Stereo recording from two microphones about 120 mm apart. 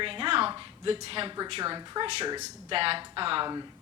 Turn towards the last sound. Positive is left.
turn(degrees=-45)  # may be behind; listen again after turning